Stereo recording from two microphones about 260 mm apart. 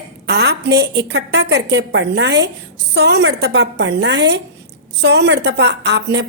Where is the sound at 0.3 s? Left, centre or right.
Right.